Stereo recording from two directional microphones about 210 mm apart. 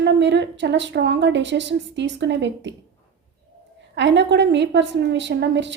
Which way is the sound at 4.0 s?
55° right (ahead or behind).